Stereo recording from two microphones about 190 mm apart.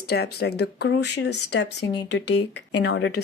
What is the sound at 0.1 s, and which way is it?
Speech, 60° left (ahead or behind).